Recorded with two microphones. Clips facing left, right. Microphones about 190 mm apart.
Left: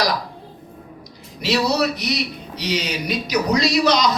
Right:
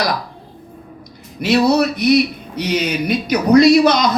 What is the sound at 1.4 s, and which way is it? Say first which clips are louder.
Speech: right 6 dB; 55° right (ahead or behind).